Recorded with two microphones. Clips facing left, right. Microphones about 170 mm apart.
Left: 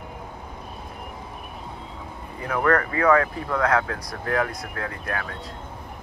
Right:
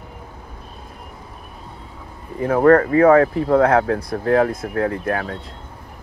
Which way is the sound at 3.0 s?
45° right (ahead or behind).